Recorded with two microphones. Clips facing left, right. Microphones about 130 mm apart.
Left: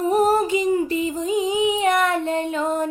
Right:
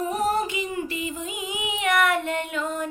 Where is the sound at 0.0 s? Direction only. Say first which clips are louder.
Left 6 dB; 35° left (ahead or behind).